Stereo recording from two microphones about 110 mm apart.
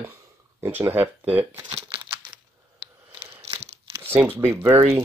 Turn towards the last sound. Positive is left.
turn(degrees=-20)  # may be behind; listen again after turning